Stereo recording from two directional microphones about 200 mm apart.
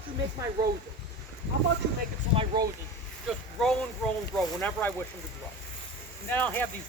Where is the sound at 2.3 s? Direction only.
25° right (ahead or behind).